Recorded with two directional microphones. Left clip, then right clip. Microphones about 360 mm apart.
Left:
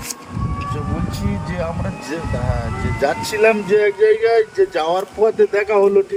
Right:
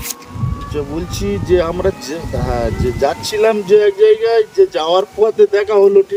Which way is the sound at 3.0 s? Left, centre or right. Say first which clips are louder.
Right 1 dB; right.